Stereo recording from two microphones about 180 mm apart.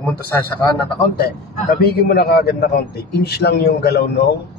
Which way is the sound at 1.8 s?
60° left (ahead or behind).